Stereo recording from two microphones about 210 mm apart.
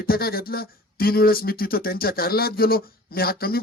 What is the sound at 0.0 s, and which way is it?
Speech, 45° left (ahead or behind).